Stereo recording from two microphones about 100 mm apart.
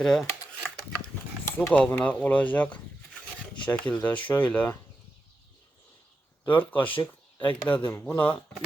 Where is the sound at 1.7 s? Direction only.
15° left (ahead or behind).